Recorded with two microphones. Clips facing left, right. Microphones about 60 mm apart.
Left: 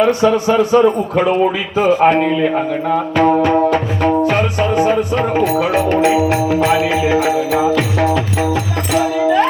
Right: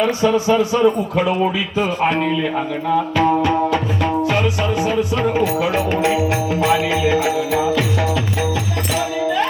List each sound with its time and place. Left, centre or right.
0.2 s speech: left
1.2 s speech: left
1.8 s speech: centre
2.0 s a man's voice: left
3.7 s music: left